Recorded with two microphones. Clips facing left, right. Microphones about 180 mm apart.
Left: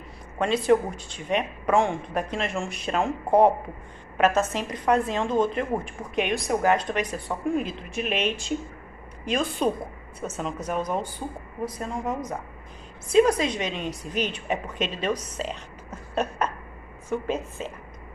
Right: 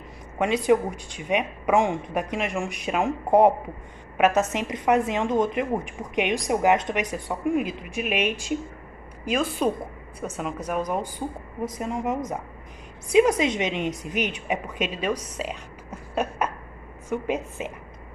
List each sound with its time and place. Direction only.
0.4 s a woman's voice: 15° right (ahead or behind)